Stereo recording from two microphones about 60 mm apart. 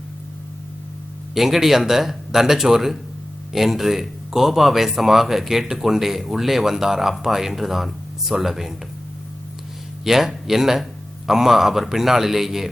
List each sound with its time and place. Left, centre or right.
1.3 s speech: centre
10.0 s speech: centre